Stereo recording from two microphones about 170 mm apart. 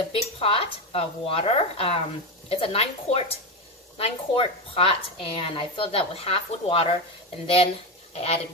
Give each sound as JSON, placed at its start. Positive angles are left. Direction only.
{"t": 0.1, "sound": "a woman's voice", "side_deg": 35}